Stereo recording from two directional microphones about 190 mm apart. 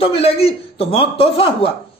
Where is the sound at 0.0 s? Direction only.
30° left (ahead or behind).